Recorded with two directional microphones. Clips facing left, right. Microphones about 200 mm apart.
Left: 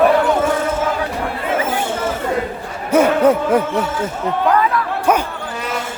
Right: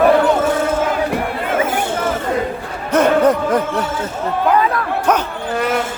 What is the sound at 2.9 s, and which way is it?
Speech, 10° left (ahead or behind).